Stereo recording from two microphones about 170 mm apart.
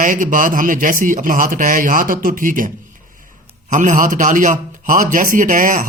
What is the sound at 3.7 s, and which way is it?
A man's voice, 50° right (ahead or behind).